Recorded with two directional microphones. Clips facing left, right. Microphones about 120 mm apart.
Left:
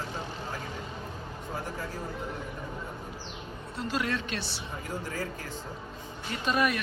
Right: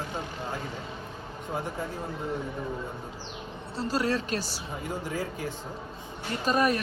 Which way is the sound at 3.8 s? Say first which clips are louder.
Right 4 dB; 35° right (ahead or behind).